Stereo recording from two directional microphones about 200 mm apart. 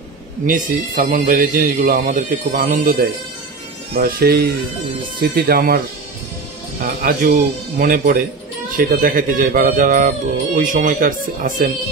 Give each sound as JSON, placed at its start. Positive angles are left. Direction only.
{"t": 0.5, "sound": "a man's voice", "side_deg": -45}
{"t": 6.8, "sound": "a man's voice", "side_deg": -45}